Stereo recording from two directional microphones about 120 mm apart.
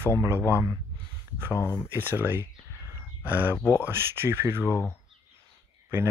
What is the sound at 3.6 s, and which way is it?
Speech, 20° left (ahead or behind).